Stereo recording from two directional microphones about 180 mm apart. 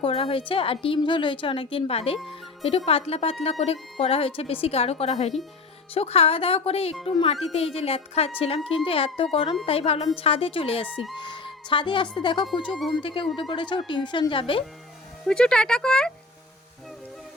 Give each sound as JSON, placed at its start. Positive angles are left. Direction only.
{"t": 0.0, "sound": "speech", "side_deg": 30}
{"t": 2.1, "sound": "speech", "side_deg": 0}
{"t": 2.6, "sound": "a woman's voice", "side_deg": 35}
{"t": 15.3, "sound": "speech", "side_deg": 5}